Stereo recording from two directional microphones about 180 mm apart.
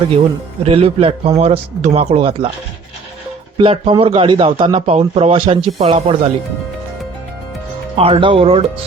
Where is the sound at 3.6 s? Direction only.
30° right (ahead or behind).